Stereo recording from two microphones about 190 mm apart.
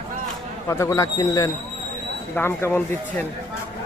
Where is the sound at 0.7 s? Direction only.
15° left (ahead or behind).